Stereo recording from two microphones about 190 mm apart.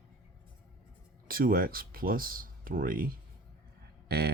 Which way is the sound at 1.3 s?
50° right (ahead or behind).